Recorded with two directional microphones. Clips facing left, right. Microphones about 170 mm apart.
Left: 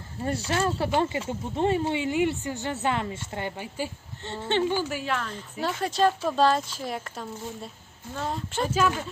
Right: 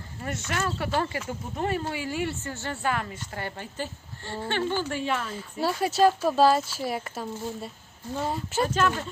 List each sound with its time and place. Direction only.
0.2 s a woman's voice: 30° left (ahead or behind); by 5.1 s 5° left (ahead or behind)
5.1 s a woman's voice: 5° right (ahead or behind)